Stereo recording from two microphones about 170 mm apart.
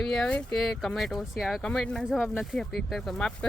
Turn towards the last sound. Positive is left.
turn(degrees=5)  # may be behind; listen again after turning